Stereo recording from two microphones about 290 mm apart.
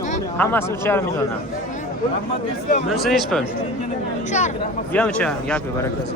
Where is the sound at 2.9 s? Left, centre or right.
Centre.